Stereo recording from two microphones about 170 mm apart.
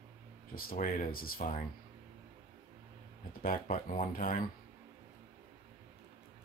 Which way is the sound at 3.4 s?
55° left (ahead or behind).